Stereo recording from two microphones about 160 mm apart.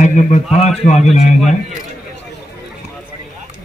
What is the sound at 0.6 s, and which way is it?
Speech, 45° left (ahead or behind).